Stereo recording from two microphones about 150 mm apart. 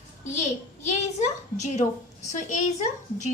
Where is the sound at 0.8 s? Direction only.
50° left (ahead or behind).